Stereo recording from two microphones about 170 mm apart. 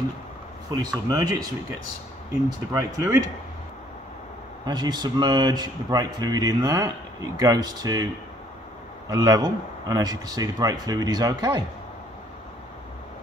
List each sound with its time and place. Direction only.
0.7 s speech: 20° right (ahead or behind)
2.7 s speech: 20° right (ahead or behind)
4.6 s speech: 25° right (ahead or behind)
9.1 s speech: 20° right (ahead or behind)